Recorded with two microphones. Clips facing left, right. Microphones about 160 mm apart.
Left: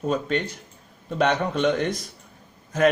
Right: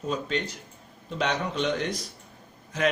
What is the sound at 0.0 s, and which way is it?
A man's voice, 50° left (ahead or behind).